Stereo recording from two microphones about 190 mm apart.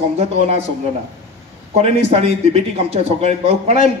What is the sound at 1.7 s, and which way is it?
Speech, 35° right (ahead or behind).